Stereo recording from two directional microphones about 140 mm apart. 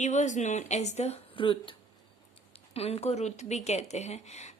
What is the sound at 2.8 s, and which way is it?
Speech, 45° left (ahead or behind).